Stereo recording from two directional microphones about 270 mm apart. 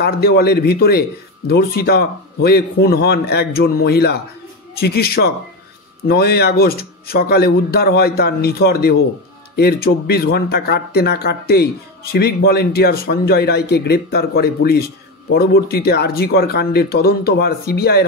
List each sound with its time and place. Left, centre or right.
0.0 s speech: left